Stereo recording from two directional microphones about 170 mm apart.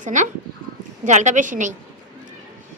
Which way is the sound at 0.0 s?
45° right (ahead or behind).